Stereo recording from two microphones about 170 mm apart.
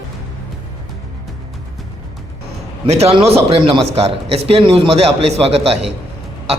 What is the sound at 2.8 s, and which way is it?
A man's voice, 40° right (ahead or behind).